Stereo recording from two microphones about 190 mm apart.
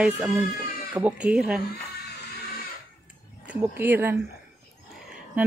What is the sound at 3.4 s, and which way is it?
Speech, 10° right (ahead or behind).